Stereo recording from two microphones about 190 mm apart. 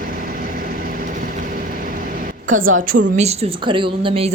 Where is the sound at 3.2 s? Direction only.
30° right (ahead or behind).